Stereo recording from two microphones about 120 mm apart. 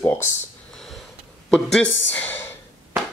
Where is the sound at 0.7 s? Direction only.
5° left (ahead or behind).